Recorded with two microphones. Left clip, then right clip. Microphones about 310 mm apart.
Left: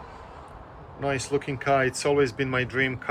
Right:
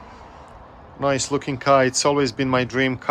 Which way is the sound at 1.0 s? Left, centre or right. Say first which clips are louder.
Right 5 dB; centre.